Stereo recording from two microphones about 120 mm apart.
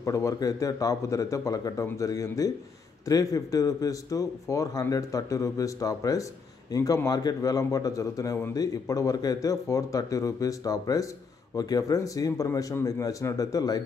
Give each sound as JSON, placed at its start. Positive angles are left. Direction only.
{"t": 0.0, "sound": "speech", "side_deg": 25}